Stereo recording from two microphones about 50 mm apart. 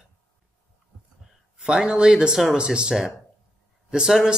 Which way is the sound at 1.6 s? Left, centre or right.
Centre.